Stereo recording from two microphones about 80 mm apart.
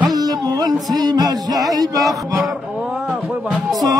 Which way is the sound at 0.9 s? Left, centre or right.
Right.